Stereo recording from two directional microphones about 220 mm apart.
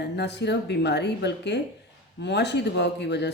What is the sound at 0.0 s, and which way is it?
Speech, 50° left (ahead or behind).